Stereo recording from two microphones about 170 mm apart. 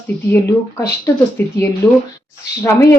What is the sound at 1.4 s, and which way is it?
Speech, 10° left (ahead or behind).